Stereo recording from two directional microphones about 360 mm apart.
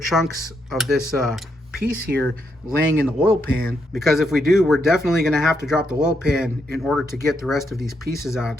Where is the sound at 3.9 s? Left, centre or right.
Centre.